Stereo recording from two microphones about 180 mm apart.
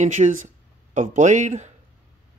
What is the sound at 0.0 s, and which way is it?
Speech, 45° right (ahead or behind).